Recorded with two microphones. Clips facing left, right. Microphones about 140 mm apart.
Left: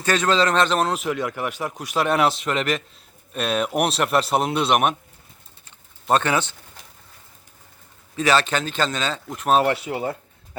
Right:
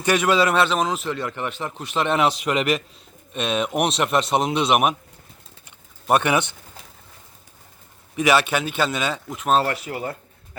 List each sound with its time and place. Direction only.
0.0 s speech: 15° right (ahead or behind); by 2.3 s 5° left (ahead or behind)
2.4 s a man's voice: 10° right (ahead or behind)
5.6 s typing: 15° right (ahead or behind)
8.1 s a man's voice: 15° right (ahead or behind)
9.3 s speech: centre (ahead or behind)
9.6 s speech: 20° left (ahead or behind)